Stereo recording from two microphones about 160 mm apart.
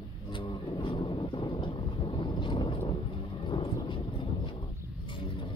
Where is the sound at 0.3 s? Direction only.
30° left (ahead or behind).